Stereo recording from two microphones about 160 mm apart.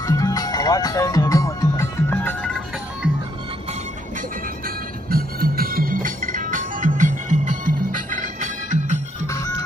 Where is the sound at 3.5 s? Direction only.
45° right (ahead or behind).